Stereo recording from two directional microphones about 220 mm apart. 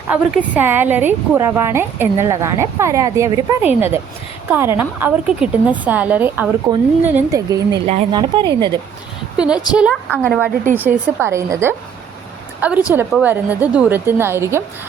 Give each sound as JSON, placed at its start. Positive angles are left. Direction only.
{"t": 0.1, "sound": "a woman's voice", "side_deg": -5}
{"t": 9.7, "sound": "a woman's voice", "side_deg": -5}
{"t": 10.1, "sound": "a woman's voice", "side_deg": 5}
{"t": 10.8, "sound": "a woman's voice", "side_deg": -10}